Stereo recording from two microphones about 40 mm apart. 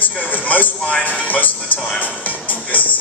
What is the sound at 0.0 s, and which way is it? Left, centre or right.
Music, left.